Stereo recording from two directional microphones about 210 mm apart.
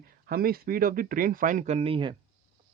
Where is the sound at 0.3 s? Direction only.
45° right (ahead or behind); by 2.1 s 25° right (ahead or behind).